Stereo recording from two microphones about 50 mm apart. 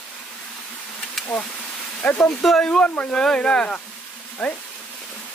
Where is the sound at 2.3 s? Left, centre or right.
Centre.